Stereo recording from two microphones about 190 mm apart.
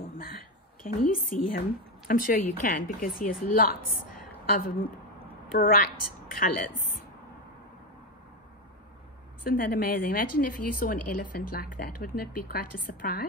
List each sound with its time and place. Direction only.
0.8 s a woman's voice: 50° left (ahead or behind)
9.4 s a woman's voice: 50° left (ahead or behind)